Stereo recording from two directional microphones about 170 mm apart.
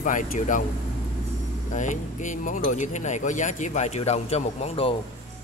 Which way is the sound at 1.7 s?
45° left (ahead or behind).